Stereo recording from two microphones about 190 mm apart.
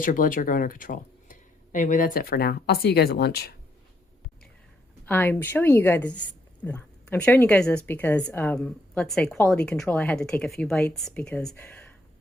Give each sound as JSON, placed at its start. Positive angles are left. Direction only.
{"t": 0.0, "sound": "speech", "side_deg": 45}
{"t": 5.0, "sound": "a woman's voice", "side_deg": 10}